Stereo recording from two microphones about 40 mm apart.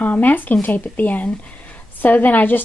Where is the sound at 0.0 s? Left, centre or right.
Left.